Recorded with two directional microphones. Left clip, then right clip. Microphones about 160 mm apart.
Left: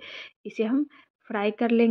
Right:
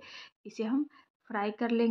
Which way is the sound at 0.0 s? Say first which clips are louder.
Left 8 dB; 20° left (ahead or behind).